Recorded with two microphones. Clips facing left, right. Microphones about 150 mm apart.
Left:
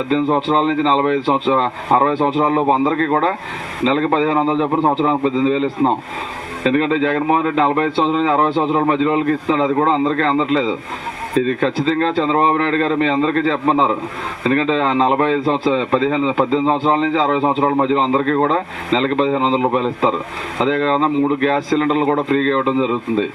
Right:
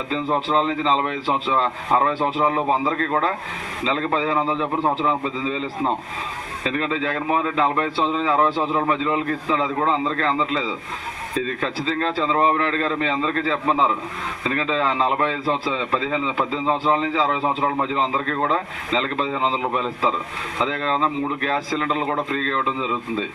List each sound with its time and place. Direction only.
0.1 s a man's voice: 30° left (ahead or behind)
6.7 s a man's voice: 35° left (ahead or behind)